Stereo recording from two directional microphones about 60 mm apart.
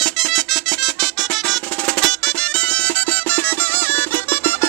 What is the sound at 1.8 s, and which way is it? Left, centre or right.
Music, centre.